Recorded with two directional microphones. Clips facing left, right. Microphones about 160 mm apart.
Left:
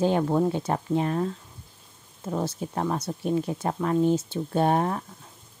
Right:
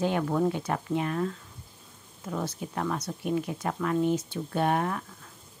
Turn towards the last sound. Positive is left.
turn(degrees=30)  # may be behind; listen again after turning